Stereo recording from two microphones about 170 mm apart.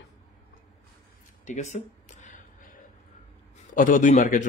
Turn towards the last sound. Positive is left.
turn(degrees=50)  # may be behind; listen again after turning